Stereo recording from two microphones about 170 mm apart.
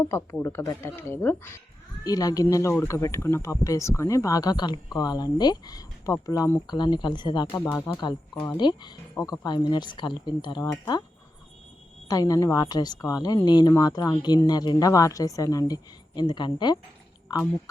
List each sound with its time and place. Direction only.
0.1 s speech: 15° left (ahead or behind)
12.0 s speech: 20° left (ahead or behind)